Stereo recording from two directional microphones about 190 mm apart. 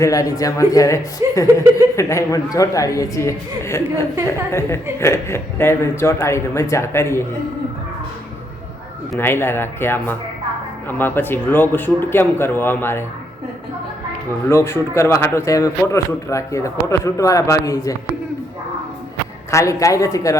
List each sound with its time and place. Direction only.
0.0 s speech: 15° left (ahead or behind)
9.1 s speech: 10° left (ahead or behind)
14.5 s speech: 15° left (ahead or behind)
19.5 s speech: 15° left (ahead or behind)